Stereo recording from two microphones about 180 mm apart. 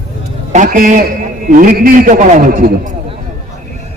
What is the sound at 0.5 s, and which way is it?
A man's voice, 50° right (ahead or behind).